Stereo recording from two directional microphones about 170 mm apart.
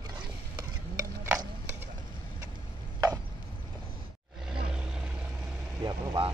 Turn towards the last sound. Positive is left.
turn(degrees=-25)  # may be behind; listen again after turning